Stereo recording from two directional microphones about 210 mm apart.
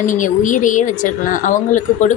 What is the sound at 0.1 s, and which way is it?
Speech, 40° left (ahead or behind).